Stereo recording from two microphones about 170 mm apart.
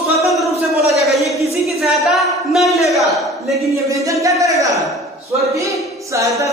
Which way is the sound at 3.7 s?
20° right (ahead or behind).